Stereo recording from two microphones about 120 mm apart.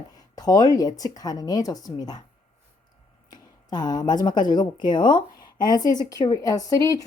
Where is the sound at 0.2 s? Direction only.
30° left (ahead or behind).